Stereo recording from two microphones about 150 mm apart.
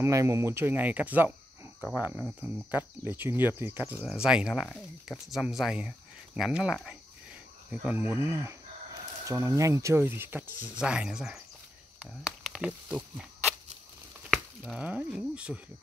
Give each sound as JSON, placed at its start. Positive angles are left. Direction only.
{"t": 0.0, "sound": "speech", "side_deg": -20}
{"t": 14.3, "sound": "chopping", "side_deg": 0}